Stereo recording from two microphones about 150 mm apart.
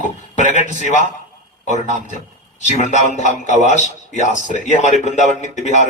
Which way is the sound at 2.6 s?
50° left (ahead or behind).